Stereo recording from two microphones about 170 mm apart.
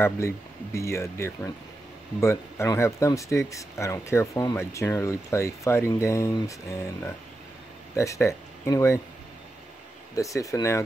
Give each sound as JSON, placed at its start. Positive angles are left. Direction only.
{"t": 0.7, "sound": "speech", "side_deg": 15}
{"t": 10.1, "sound": "speech", "side_deg": 20}